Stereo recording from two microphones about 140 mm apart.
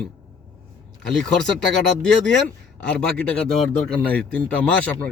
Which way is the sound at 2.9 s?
5° left (ahead or behind).